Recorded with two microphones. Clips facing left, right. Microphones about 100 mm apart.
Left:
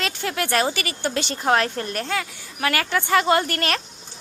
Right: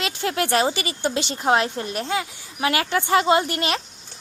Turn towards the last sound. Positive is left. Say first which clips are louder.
# right 1 dB
turn(degrees=-15)  # may be behind; listen again after turning